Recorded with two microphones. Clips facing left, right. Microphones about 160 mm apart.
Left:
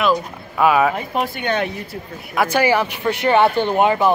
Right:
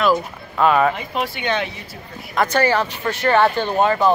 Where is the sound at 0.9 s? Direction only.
45° left (ahead or behind).